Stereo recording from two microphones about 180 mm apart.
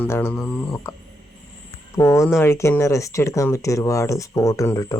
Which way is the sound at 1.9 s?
15° left (ahead or behind).